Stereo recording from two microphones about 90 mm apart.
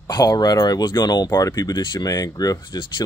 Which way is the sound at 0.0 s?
45° left (ahead or behind).